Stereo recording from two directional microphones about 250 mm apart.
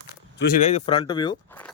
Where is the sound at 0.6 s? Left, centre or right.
Left.